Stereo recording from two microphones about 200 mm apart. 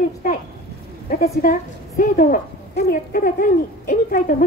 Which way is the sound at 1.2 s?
45° left (ahead or behind).